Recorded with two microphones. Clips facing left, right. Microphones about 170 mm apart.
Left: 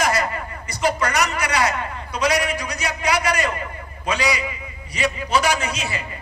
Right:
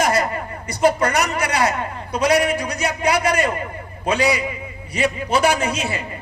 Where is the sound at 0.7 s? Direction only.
55° right (ahead or behind).